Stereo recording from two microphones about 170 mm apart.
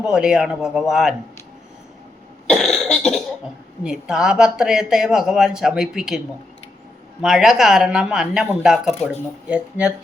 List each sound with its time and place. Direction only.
0.0 s speech: 5° right (ahead or behind)
2.5 s cough: centre (ahead or behind)
3.8 s speech: 5° right (ahead or behind)